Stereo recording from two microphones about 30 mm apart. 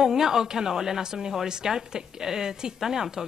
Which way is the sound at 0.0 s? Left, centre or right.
Centre.